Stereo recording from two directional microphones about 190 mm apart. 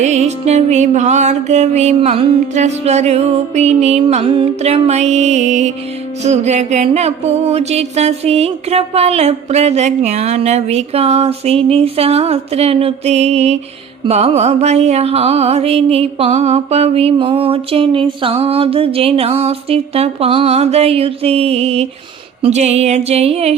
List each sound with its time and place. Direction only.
0.0 s music: 35° right (ahead or behind)